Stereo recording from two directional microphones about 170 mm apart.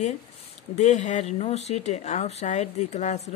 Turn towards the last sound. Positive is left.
turn(degrees=40)  # may be behind; listen again after turning